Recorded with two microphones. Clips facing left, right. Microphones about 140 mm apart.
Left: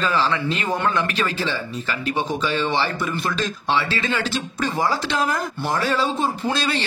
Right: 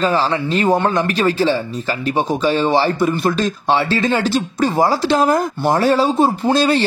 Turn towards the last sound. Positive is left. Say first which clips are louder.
# right 9 dB
turn(degrees=-35)  # may be behind; listen again after turning